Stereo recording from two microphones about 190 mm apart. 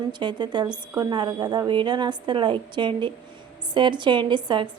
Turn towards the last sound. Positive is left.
turn(degrees=-25)  # may be behind; listen again after turning